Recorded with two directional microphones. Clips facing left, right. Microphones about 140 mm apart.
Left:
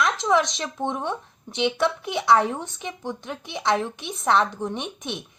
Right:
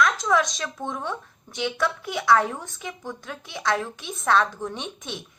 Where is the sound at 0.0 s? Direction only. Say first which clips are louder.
Left 1 dB; 25° left (ahead or behind).